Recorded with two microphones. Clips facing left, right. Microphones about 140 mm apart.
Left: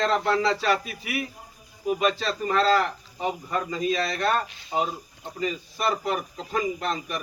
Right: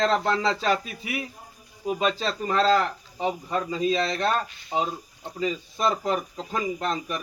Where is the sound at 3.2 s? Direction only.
25° right (ahead or behind).